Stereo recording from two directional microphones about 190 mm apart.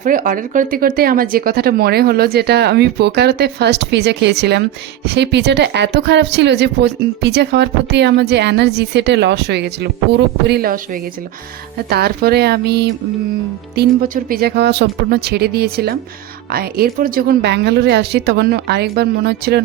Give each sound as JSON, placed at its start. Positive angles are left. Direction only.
{"t": 0.0, "sound": "speech", "side_deg": -45}
{"t": 13.7, "sound": "speech", "side_deg": -50}